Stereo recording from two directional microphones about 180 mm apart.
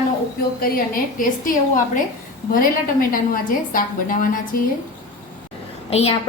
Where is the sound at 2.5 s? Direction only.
50° left (ahead or behind).